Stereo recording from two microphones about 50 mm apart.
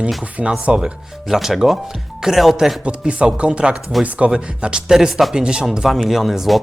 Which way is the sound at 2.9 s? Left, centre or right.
Right.